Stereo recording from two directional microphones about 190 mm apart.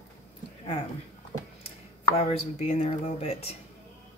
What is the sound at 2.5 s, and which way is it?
Speech, 35° left (ahead or behind).